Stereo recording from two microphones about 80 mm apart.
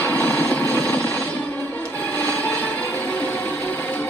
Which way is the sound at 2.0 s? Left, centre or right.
Left.